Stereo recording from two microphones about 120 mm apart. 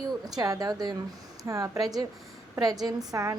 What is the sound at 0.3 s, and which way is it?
A woman's voice, 30° right (ahead or behind).